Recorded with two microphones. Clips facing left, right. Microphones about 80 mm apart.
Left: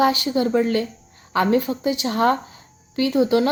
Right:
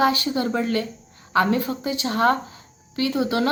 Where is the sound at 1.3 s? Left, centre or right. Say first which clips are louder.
Left 1 dB; left.